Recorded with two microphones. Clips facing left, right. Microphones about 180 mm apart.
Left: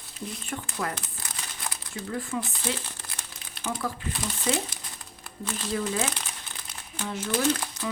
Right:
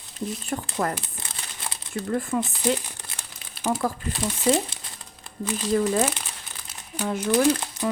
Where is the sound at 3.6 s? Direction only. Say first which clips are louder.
Right 6 dB; 40° right (ahead or behind).